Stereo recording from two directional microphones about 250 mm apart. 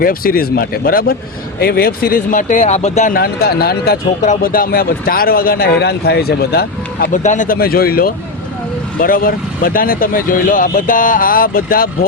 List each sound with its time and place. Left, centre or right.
0.0 s speech: left